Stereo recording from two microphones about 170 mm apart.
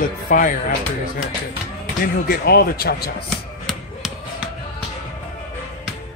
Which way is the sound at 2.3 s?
65° left (ahead or behind).